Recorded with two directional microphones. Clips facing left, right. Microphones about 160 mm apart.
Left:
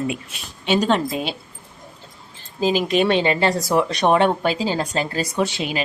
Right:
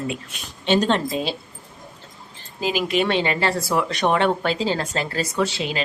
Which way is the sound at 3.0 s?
20° left (ahead or behind).